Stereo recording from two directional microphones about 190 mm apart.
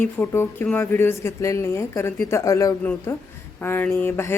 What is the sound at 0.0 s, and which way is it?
Speech, 10° left (ahead or behind).